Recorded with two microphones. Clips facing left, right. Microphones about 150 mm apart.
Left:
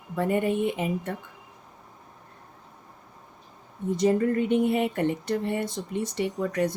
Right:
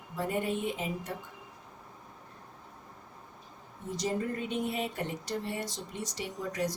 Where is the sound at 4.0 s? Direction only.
60° left (ahead or behind).